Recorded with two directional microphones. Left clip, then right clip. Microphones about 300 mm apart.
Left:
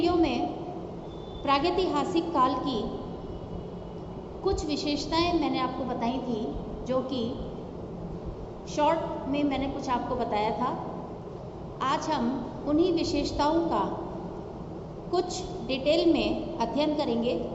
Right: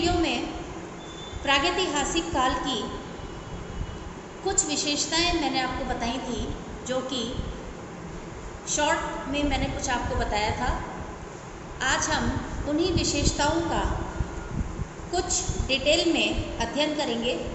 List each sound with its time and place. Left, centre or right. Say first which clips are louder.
0.0 s a sound: even; centre
1.5 s a woman's voice: right 2 dB; centre
4.4 s a woman's voice: right 2 dB; centre
8.7 s a woman's voice: even; centre
11.8 s a woman's voice: right 2 dB; centre
15.1 s a woman's voice: right 1 dB; centre